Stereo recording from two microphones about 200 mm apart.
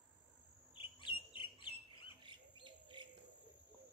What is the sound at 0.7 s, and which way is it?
Bird, 25° left (ahead or behind).